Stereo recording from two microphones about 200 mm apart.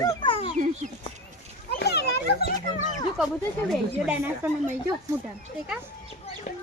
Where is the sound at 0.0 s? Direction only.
20° left (ahead or behind).